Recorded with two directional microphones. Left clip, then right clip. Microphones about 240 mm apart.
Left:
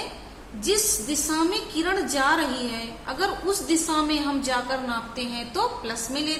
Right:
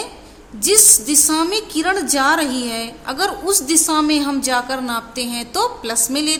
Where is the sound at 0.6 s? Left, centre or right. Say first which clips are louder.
Right 9 dB; right.